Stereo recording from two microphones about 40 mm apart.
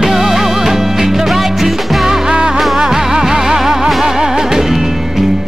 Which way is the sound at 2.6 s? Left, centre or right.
Centre.